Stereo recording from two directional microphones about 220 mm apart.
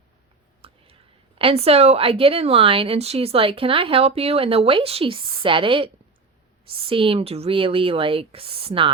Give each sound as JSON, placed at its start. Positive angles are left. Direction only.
{"t": 0.6, "sound": "whispering", "side_deg": -25}
{"t": 1.4, "sound": "speech", "side_deg": -25}